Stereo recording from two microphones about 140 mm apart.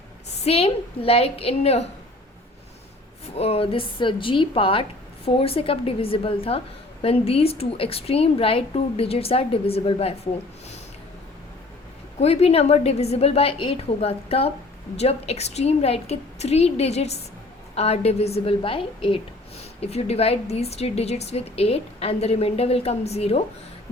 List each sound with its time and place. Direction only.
0.3 s a woman's voice: 45° left (ahead or behind)
3.3 s a woman's voice: 45° left (ahead or behind)
12.2 s a woman's voice: 45° left (ahead or behind)